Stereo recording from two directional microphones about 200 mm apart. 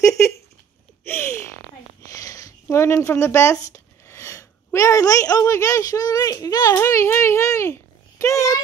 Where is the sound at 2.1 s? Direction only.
15° left (ahead or behind).